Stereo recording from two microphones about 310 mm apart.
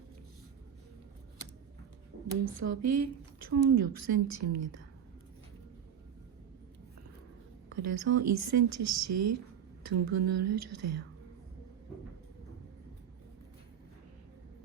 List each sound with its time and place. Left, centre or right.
2.4 s speech: right
7.7 s speech: right